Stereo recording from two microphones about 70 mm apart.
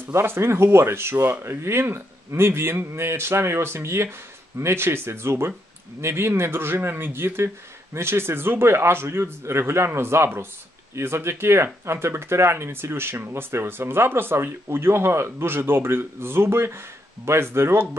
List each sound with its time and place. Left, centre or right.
0.0 s speech: right